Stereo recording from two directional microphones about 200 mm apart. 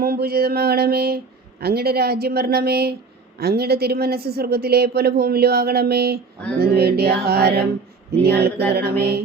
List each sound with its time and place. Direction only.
0.0 s speech: 50° right (ahead or behind)